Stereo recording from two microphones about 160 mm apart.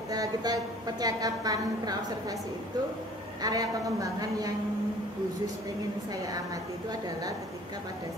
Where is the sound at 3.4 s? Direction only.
20° right (ahead or behind).